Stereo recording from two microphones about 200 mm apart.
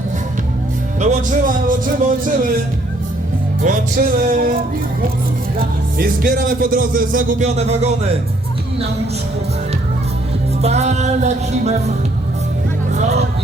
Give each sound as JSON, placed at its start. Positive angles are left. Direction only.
{"t": 0.9, "sound": "music", "side_deg": -40}
{"t": 3.6, "sound": "music", "side_deg": -40}
{"t": 6.0, "sound": "speech", "side_deg": -45}
{"t": 10.6, "sound": "music", "side_deg": -35}
{"t": 12.9, "sound": "hubbub", "side_deg": -35}